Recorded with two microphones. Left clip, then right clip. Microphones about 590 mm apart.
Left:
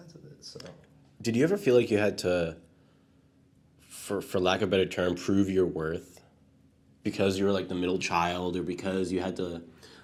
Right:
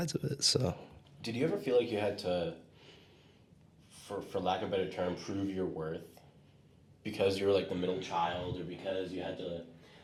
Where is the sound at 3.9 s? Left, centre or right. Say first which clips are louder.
Left 7 dB; left.